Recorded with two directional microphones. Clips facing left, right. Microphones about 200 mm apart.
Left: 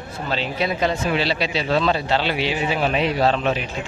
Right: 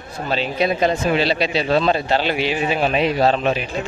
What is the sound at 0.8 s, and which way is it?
Speech, 40° right (ahead or behind).